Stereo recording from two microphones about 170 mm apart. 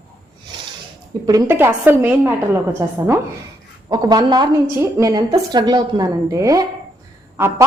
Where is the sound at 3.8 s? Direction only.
25° right (ahead or behind).